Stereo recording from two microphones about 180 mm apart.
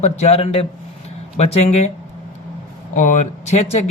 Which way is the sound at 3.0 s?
40° left (ahead or behind).